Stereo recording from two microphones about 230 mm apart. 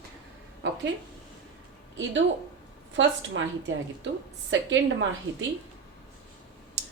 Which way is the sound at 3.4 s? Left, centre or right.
Right.